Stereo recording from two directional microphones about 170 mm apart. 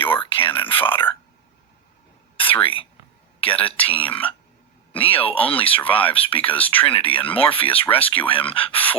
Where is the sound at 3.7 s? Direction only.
10° left (ahead or behind).